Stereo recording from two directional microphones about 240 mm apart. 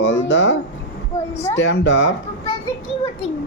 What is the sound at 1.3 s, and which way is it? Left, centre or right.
Speech, left.